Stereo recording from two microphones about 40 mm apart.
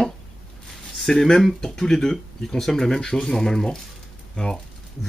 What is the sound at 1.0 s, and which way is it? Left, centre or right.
Speech, centre.